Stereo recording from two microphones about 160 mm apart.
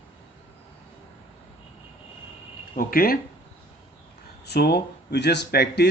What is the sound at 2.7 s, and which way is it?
Speech, 65° left (ahead or behind).